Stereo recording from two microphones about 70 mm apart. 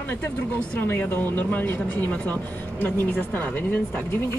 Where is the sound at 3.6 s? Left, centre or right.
Left.